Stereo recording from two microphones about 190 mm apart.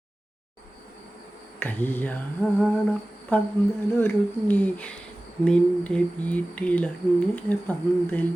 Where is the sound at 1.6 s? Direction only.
10° left (ahead or behind).